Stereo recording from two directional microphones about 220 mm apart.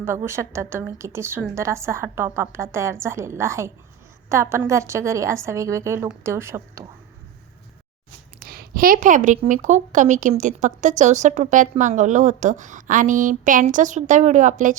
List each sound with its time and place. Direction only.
0.0 s a woman's voice: 10° right (ahead or behind)
8.4 s a woman's voice: 40° right (ahead or behind)